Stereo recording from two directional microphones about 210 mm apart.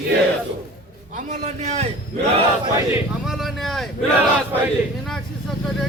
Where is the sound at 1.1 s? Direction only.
35° right (ahead or behind).